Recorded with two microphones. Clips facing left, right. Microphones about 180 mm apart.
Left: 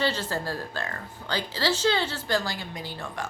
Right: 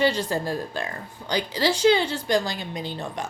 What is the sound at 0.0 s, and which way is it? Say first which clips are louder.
A woman's voice: right 5 dB; 15° right (ahead or behind).